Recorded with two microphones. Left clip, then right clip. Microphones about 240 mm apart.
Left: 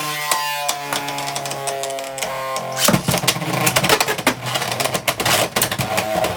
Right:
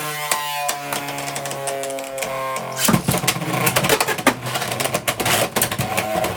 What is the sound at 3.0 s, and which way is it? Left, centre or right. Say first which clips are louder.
Pigeon: left 2 dB; centre.